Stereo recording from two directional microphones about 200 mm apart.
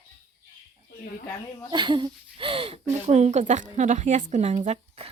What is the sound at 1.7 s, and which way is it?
Speech, 25° right (ahead or behind).